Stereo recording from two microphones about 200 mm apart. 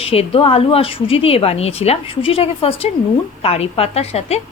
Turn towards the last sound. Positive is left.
turn(degrees=30)  # may be behind; listen again after turning